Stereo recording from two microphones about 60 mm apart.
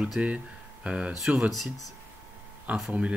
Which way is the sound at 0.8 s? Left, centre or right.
Centre.